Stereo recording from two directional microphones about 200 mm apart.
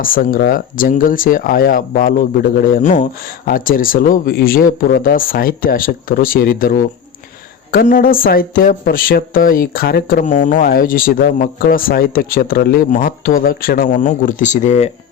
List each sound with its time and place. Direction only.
0.0 s speech: 45° left (ahead or behind)